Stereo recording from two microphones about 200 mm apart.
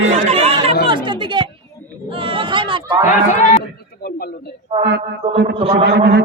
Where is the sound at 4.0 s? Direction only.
50° left (ahead or behind).